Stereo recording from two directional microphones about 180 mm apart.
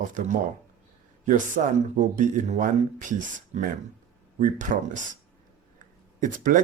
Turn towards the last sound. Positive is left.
turn(degrees=-45)  # may be behind; listen again after turning